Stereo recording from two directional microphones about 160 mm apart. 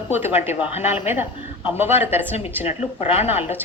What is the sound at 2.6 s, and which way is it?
Speech, 40° left (ahead or behind).